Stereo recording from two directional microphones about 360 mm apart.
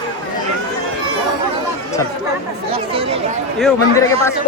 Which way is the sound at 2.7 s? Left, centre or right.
Centre.